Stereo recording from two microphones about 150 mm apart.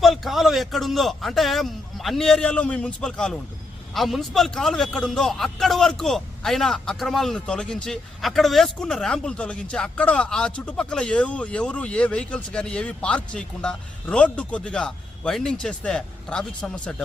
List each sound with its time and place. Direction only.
0.0 s a man's voice: centre (ahead or behind)